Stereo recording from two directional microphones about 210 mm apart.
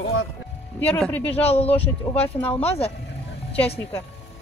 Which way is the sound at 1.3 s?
30° left (ahead or behind).